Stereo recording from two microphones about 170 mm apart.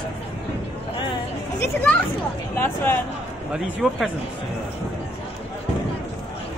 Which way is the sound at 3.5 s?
Centre (ahead or behind).